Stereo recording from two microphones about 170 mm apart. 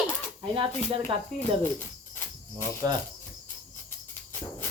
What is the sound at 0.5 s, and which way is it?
Speech, 30° right (ahead or behind).